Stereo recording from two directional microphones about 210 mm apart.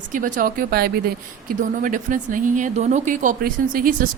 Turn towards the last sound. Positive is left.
turn(degrees=-40)  # may be behind; listen again after turning